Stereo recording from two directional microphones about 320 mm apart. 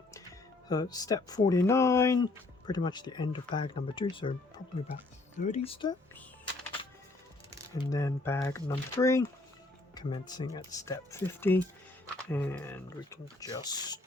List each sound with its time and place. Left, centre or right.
0.7 s speech: centre
7.8 s speech: centre